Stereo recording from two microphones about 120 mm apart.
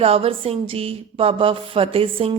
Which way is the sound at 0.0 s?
55° right (ahead or behind).